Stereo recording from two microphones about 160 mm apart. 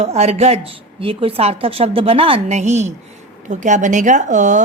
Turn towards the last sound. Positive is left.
turn(degrees=-50)  # may be behind; listen again after turning